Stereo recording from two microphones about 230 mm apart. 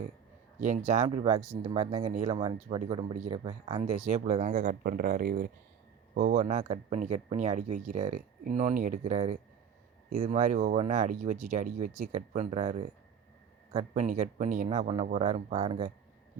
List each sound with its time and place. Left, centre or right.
0.6 s speech: right